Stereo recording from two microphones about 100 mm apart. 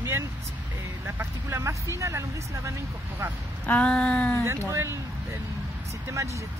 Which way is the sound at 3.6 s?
15° left (ahead or behind).